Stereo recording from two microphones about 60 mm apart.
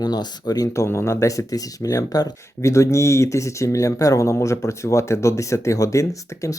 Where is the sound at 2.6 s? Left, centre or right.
Left.